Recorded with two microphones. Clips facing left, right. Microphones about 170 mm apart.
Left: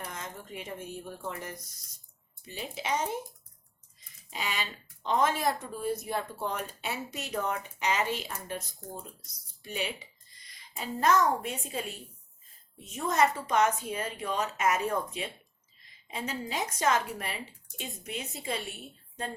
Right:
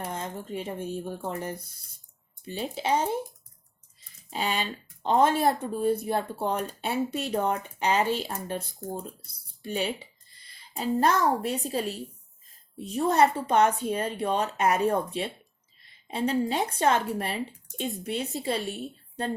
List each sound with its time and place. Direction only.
0.0 s speech: 30° right (ahead or behind)
4.3 s speech: 30° right (ahead or behind)
18.6 s a woman's voice: centre (ahead or behind)